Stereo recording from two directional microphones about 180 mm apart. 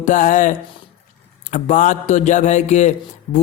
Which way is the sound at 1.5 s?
45° left (ahead or behind).